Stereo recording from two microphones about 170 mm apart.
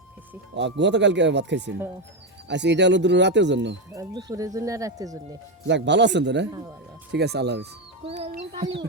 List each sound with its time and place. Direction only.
0.5 s speech: 90° right
3.9 s speech: 20° right (ahead or behind)
5.6 s speech: 90° right
6.5 s speech: 25° right (ahead or behind)
7.1 s speech: 75° right (ahead or behind)